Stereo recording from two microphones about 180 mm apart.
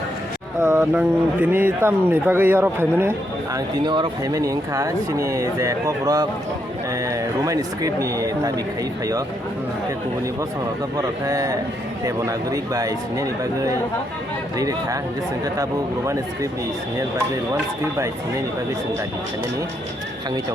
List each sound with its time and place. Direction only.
0.6 s speech: 10° right (ahead or behind)
3.8 s speech: 25° right (ahead or behind)
10.9 s speech: 20° right (ahead or behind)
16.0 s speech: 15° right (ahead or behind)